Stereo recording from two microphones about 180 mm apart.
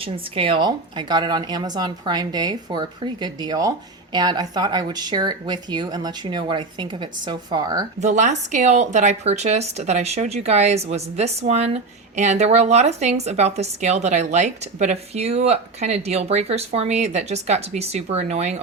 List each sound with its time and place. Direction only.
0.0 s speech: 30° right (ahead or behind)
8.0 s a woman's voice: 40° right (ahead or behind)